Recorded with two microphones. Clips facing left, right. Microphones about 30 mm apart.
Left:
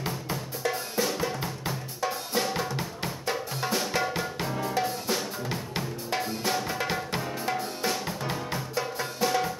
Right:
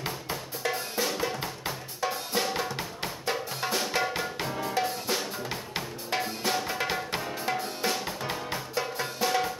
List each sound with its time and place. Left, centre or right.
0.0 s drum: right
7.1 s music: right